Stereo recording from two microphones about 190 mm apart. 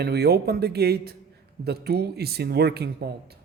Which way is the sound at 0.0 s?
60° right (ahead or behind).